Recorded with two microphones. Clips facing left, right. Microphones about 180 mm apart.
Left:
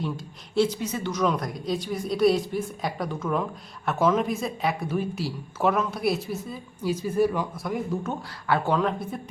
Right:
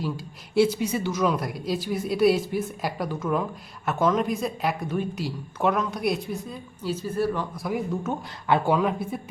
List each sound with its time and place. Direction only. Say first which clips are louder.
0.5 s speech: right 3 dB; 10° right (ahead or behind); by 7.4 s 10° left (ahead or behind)
7.5 s speech: right 1 dB; centre (ahead or behind)
8.4 s speech: right 2 dB; 20° right (ahead or behind)
8.7 s speech: right 1 dB; 10° right (ahead or behind)